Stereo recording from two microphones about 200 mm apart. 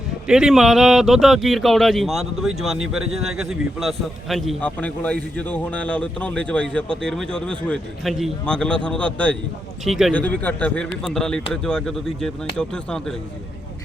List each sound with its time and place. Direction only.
0.3 s speech: 5° right (ahead or behind)